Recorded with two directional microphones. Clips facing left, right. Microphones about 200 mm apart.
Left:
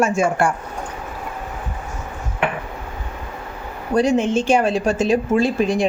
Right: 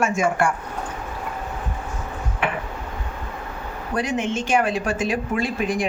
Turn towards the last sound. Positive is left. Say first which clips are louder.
# left 6 dB
turn(degrees=30)  # may be behind; listen again after turning